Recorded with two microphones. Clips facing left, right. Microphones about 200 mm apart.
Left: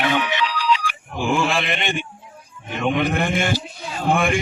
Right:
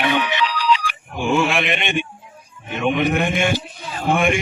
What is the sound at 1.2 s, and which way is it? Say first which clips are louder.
Speech: right 2 dB; 20° right (ahead or behind).